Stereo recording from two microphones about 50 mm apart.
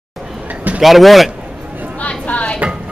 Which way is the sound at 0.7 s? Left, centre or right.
Centre.